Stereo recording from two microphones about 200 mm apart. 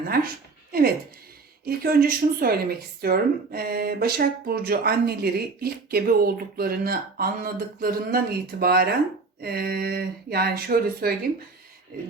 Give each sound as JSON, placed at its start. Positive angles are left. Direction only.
{"t": 0.7, "sound": "speech", "side_deg": -50}